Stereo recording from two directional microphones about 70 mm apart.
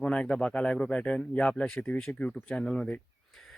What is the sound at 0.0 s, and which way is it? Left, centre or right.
Speech, centre.